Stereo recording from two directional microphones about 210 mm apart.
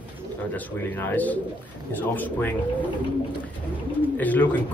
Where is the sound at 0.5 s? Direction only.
10° left (ahead or behind).